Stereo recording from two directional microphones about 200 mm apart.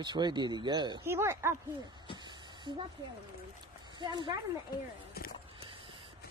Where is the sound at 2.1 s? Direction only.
20° right (ahead or behind).